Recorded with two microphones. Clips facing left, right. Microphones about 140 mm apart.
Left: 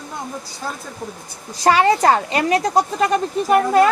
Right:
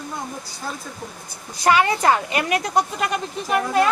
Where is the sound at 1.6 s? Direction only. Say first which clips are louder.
Left 3 dB; 35° left (ahead or behind).